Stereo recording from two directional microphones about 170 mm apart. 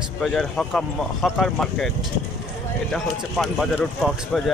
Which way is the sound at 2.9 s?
Centre (ahead or behind).